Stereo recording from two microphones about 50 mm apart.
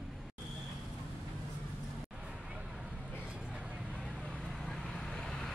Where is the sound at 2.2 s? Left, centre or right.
Centre.